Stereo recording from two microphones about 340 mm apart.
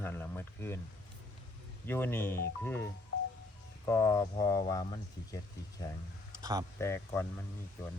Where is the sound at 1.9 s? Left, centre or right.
Centre.